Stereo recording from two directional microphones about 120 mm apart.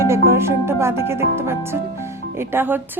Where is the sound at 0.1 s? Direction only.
20° right (ahead or behind).